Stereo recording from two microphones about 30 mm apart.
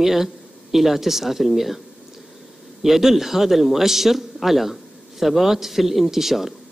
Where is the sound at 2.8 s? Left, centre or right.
Centre.